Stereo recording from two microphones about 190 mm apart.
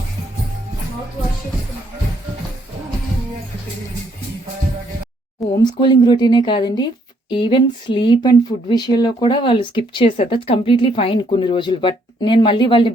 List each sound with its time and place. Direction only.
5.4 s speech: 25° left (ahead or behind)